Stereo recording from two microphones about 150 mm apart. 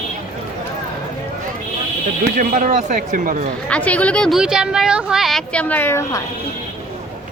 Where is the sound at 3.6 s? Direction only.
10° left (ahead or behind).